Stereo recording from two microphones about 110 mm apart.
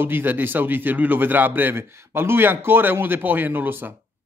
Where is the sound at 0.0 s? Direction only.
20° right (ahead or behind).